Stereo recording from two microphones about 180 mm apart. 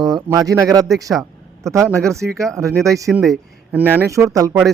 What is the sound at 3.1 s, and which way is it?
Speech, centre (ahead or behind).